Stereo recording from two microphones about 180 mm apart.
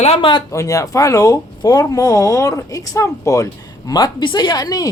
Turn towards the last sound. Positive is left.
turn(degrees=20)  # may be behind; listen again after turning